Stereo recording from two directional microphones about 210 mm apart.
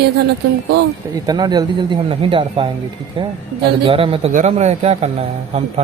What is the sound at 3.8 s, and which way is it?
A man's voice, 25° right (ahead or behind).